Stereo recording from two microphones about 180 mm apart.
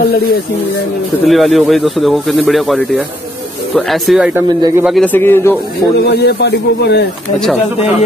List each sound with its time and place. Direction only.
1.2 s speech: centre (ahead or behind)
4.3 s speech: 15° right (ahead or behind)
4.8 s a man's voice: 5° left (ahead or behind)
6.0 s speech: 65° left (ahead or behind)